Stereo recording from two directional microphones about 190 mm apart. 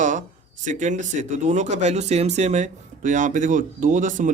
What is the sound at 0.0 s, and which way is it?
Speech, 40° right (ahead or behind).